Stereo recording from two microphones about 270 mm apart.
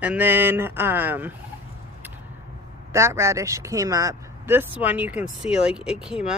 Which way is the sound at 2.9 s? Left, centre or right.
Centre.